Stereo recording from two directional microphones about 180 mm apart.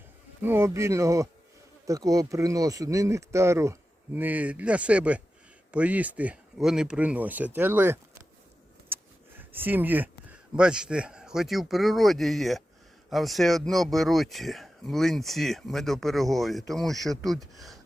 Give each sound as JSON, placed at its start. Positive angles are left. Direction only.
{"t": 0.4, "sound": "speech", "side_deg": -15}
{"t": 8.9, "sound": "a sound", "side_deg": -10}
{"t": 9.4, "sound": "speech", "side_deg": -10}